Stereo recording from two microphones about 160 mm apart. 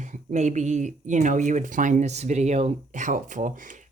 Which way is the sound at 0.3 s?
50° right (ahead or behind).